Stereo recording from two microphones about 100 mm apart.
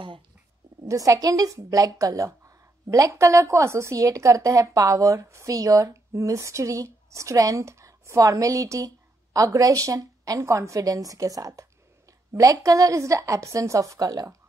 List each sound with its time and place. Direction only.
0.8 s a woman's voice: 35° right (ahead or behind)